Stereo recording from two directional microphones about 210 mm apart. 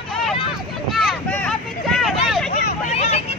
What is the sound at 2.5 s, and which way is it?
Hubbub, 35° left (ahead or behind).